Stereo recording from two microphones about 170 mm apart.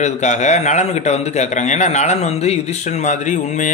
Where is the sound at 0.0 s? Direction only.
45° left (ahead or behind).